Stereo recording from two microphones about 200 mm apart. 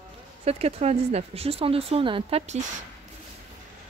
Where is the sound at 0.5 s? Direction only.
30° right (ahead or behind).